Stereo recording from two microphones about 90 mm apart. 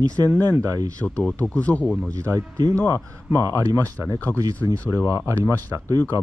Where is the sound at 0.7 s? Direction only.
45° right (ahead or behind).